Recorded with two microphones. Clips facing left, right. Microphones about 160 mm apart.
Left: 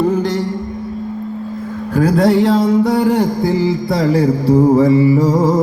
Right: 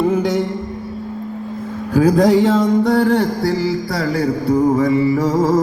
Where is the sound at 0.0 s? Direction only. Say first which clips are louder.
Left 1 dB; 5° right (ahead or behind).